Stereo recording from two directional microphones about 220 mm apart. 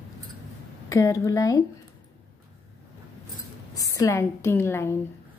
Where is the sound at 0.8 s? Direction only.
15° left (ahead or behind).